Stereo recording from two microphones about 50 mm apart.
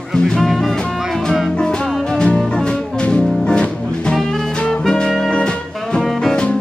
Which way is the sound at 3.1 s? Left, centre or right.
Centre.